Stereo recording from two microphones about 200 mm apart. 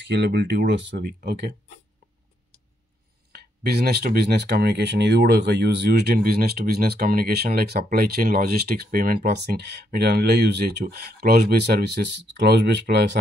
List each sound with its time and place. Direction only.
0.1 s speech: 60° right (ahead or behind)
3.3 s speech: 50° right (ahead or behind)